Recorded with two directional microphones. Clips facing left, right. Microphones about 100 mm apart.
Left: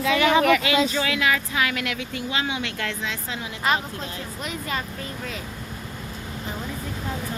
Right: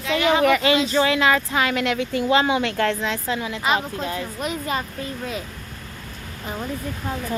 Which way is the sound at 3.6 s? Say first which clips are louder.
Right 1 dB; 5° right (ahead or behind).